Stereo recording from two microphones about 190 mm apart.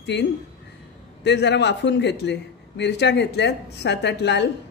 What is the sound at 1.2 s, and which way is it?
Speech, 65° left (ahead or behind).